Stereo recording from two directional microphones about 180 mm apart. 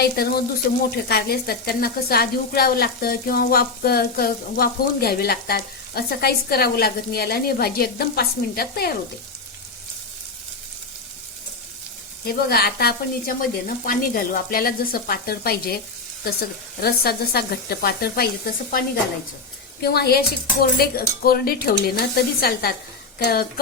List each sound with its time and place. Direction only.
1.0 s speech: 60° left (ahead or behind)
12.2 s speech: 55° left (ahead or behind)
19.8 s speech: 60° left (ahead or behind)